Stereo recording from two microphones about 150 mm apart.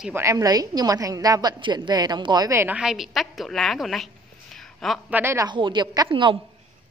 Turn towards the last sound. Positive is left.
turn(degrees=-35)  # may be behind; listen again after turning